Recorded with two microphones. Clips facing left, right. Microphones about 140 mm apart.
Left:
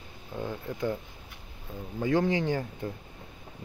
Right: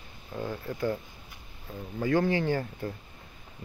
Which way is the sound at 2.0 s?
20° left (ahead or behind).